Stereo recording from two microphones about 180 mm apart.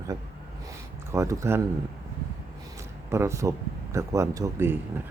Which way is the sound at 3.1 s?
15° right (ahead or behind).